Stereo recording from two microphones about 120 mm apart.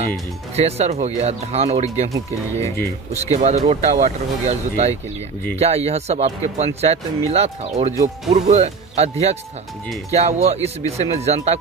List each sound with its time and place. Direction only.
0.6 s speech: 60° right (ahead or behind)
2.6 s speech: 25° left (ahead or behind)
3.3 s speech: 70° right (ahead or behind)